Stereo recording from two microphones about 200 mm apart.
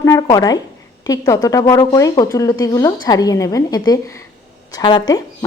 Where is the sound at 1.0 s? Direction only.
15° left (ahead or behind).